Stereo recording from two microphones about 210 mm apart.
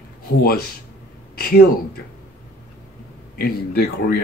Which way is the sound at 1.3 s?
45° left (ahead or behind).